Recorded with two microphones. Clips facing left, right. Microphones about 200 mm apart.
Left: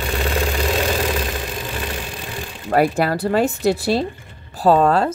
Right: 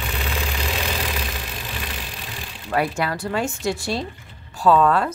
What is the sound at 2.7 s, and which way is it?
Speech, 40° left (ahead or behind).